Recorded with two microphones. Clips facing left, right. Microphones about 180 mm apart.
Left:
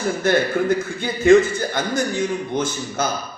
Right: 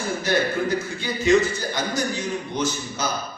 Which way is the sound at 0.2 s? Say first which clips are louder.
Left 4 dB; 55° left (ahead or behind).